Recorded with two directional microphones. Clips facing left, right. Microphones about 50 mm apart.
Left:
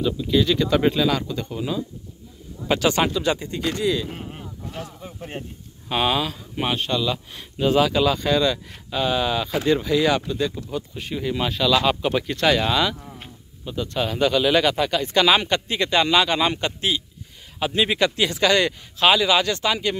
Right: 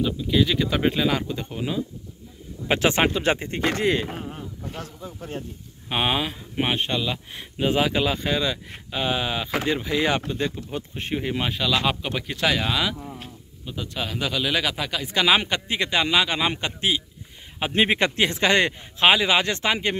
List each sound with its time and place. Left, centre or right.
0.0 s speech: centre; by 4.1 s right
4.8 s speech: centre
5.9 s speech: centre
17.6 s speech: right